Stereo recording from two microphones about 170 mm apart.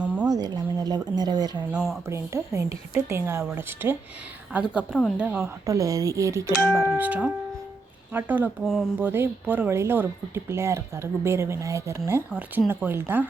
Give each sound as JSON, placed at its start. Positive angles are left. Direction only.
{"t": 0.3, "sound": "speech", "side_deg": -25}
{"t": 1.5, "sound": "speech", "side_deg": -5}
{"t": 2.0, "sound": "speech", "side_deg": -15}
{"t": 5.6, "sound": "speech", "side_deg": -20}